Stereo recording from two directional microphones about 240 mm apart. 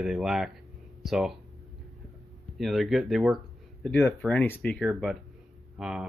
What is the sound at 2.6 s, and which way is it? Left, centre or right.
Speech, centre.